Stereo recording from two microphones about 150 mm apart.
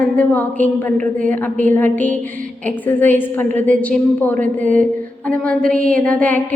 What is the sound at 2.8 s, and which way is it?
A woman's voice, 15° left (ahead or behind).